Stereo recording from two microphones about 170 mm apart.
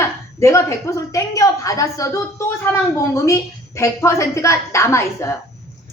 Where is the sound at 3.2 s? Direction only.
15° left (ahead or behind).